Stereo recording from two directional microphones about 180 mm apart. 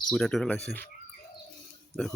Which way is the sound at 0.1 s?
Centre (ahead or behind).